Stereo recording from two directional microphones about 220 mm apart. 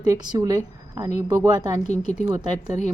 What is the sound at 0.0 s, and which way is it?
A woman's voice, 15° right (ahead or behind).